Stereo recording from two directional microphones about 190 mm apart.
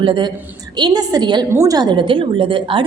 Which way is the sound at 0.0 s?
25° right (ahead or behind).